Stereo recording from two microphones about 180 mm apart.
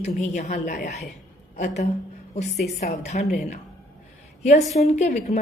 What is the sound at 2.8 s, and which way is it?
A woman's voice, 40° left (ahead or behind).